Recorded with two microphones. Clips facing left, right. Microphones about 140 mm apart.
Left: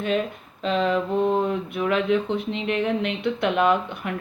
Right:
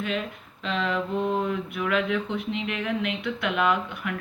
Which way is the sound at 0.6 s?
35° left (ahead or behind).